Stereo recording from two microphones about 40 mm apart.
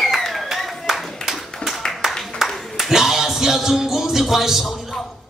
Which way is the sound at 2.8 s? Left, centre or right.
Centre.